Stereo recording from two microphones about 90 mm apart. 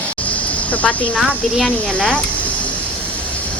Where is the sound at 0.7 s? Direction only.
15° left (ahead or behind).